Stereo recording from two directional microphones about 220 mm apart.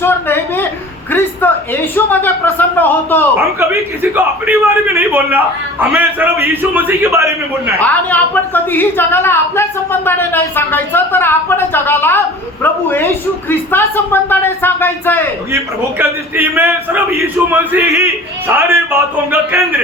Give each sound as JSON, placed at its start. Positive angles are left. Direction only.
{"t": 0.0, "sound": "a woman's voice", "side_deg": 10}
{"t": 4.1, "sound": "a man's voice", "side_deg": -10}
{"t": 7.8, "sound": "a woman's voice", "side_deg": 5}
{"t": 15.5, "sound": "a man's voice", "side_deg": -10}